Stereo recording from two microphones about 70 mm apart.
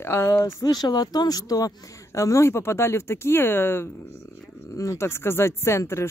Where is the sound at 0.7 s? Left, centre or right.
Left.